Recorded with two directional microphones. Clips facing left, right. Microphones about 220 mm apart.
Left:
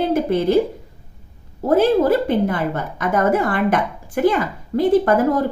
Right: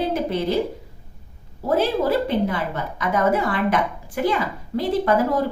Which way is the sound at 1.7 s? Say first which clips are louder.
Left 5 dB; 50° left (ahead or behind).